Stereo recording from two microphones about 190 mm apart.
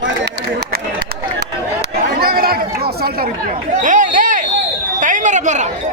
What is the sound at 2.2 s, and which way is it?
Chatter, 50° right (ahead or behind).